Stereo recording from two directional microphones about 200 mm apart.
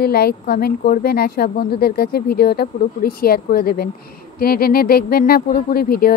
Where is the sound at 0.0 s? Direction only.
50° left (ahead or behind).